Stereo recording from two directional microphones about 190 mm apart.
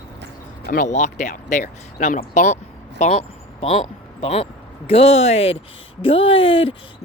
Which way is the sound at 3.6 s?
30° left (ahead or behind).